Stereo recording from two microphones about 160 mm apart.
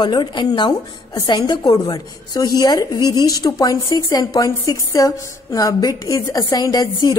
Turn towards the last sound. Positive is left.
turn(degrees=20)  # may be behind; listen again after turning